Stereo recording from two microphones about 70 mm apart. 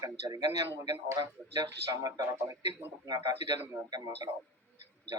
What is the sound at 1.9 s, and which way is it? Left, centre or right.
Speech, right.